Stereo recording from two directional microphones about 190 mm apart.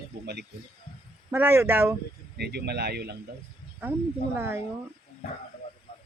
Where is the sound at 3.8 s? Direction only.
10° right (ahead or behind).